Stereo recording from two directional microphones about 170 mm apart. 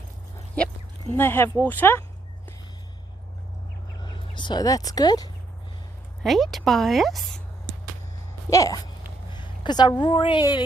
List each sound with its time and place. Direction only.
0.5 s speech: 10° left (ahead or behind)
4.0 s speech: 25° left (ahead or behind)
6.2 s a woman's voice: centre (ahead or behind)
8.4 s a woman's voice: 20° left (ahead or behind)
9.3 s a sound: 25° left (ahead or behind)
10.0 s a woman's voice: 30° left (ahead or behind)